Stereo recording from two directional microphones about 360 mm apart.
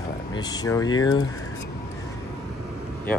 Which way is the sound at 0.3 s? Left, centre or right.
Centre.